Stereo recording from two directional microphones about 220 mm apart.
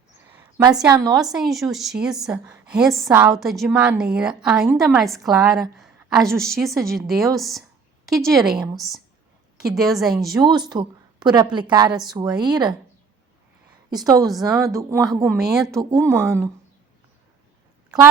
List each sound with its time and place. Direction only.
0.9 s speech: 15° right (ahead or behind)
1.1 s a woman's voice: centre (ahead or behind)
10.3 s a woman's voice: 20° right (ahead or behind)
11.9 s a woman's voice: centre (ahead or behind)
12.1 s a woman's voice: 20° right (ahead or behind)
13.9 s speech: 15° right (ahead or behind)
15.4 s a woman's voice: centre (ahead or behind)
15.8 s speech: 15° right (ahead or behind)